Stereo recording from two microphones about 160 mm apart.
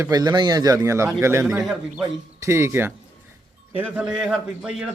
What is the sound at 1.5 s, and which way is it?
Speech, 5° right (ahead or behind).